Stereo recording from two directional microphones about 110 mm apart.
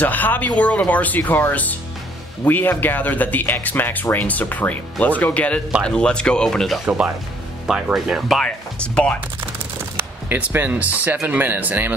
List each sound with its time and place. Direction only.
0.0 s speech: 15° left (ahead or behind)
10.3 s speech: 15° right (ahead or behind)